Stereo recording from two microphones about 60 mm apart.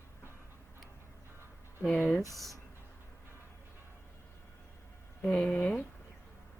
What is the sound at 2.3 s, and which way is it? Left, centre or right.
Speech, centre.